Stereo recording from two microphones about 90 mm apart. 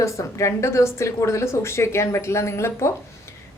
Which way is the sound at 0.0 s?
35° left (ahead or behind).